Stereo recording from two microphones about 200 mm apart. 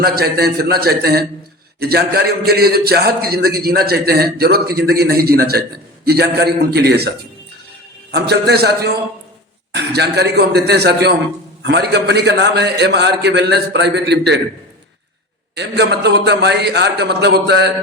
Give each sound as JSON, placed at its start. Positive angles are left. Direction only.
{"t": 0.0, "sound": "a man's voice", "side_deg": -50}
{"t": 8.1, "sound": "a man's voice", "side_deg": -55}
{"t": 15.5, "sound": "a man's voice", "side_deg": -60}